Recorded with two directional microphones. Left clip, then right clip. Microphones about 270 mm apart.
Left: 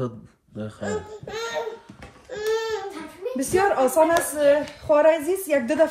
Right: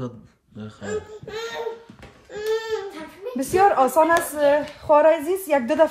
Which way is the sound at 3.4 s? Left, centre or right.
Right.